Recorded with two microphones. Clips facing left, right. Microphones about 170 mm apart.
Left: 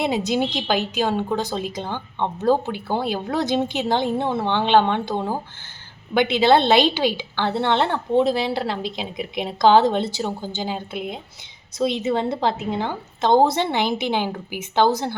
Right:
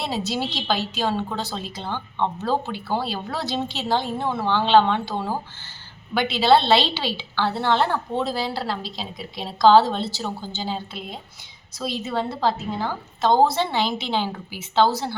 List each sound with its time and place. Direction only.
0.3 s a woman's voice: 15° left (ahead or behind)